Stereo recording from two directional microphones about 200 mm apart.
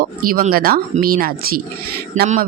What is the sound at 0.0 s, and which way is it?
A man's voice, 45° right (ahead or behind).